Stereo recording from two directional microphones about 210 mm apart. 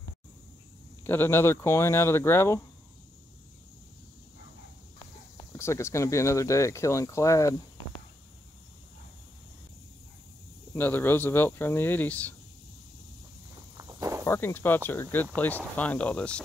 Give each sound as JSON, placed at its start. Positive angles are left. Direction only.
{"t": 1.0, "sound": "speech", "side_deg": 10}
{"t": 5.6, "sound": "speech", "side_deg": 15}
{"t": 10.7, "sound": "speech", "side_deg": 10}
{"t": 13.7, "sound": "walk", "side_deg": -15}
{"t": 14.2, "sound": "speech", "side_deg": 10}